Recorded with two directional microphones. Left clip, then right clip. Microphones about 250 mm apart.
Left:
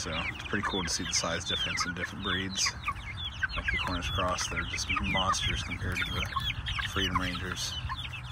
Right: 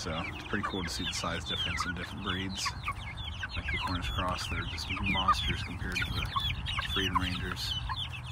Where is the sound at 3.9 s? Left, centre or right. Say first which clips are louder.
Left 3 dB; centre.